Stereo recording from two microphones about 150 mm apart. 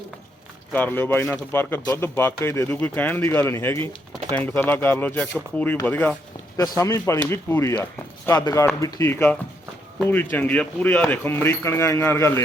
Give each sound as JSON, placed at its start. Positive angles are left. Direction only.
{"t": 0.7, "sound": "speech", "side_deg": 15}